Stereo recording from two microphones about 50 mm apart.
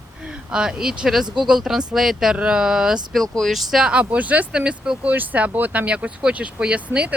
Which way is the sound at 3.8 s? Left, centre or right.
Right.